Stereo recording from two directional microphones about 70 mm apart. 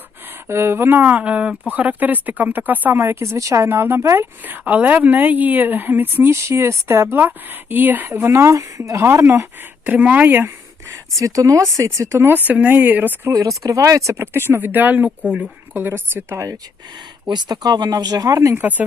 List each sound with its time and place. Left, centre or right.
0.4 s a woman's voice: right
3.3 s speech: right
3.7 s speech: right
4.4 s a woman's voice: right
8.3 s speech: right
9.8 s a woman's voice: right
11.2 s speech: right
12.5 s a woman's voice: right
13.6 s speech: right; by 15.4 s centre
15.7 s speech: right
17.3 s speech: right
18.4 s a woman's voice: right